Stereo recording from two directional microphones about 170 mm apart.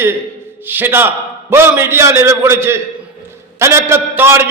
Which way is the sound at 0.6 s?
10° right (ahead or behind).